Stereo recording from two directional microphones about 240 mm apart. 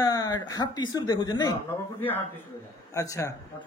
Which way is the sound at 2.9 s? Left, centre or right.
Centre.